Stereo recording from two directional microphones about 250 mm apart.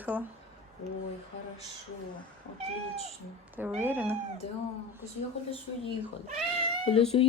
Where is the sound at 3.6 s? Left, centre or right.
Centre.